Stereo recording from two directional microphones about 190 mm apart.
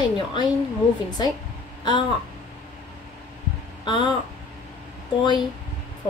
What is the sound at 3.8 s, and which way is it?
Speech, 25° left (ahead or behind).